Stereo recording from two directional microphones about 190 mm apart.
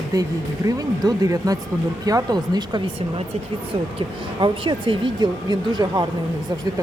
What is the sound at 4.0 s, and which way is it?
Speech, 25° right (ahead or behind).